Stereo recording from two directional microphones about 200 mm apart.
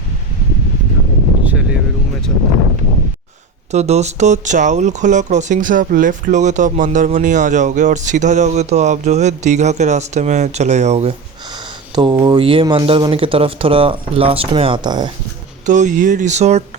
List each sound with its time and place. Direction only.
1.5 s vehicle: 5° right (ahead or behind)
3.7 s speech: 35° right (ahead or behind)
11.5 s speech: 20° right (ahead or behind)
15.6 s speech: 40° right (ahead or behind)